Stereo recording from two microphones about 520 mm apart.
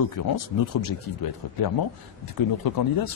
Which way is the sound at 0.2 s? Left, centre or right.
Left.